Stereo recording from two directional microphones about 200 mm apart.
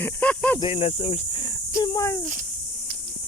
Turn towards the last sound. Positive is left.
turn(degrees=15)  # may be behind; listen again after turning